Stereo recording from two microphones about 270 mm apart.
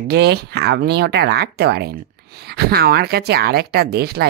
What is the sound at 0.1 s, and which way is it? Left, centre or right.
Speech, right.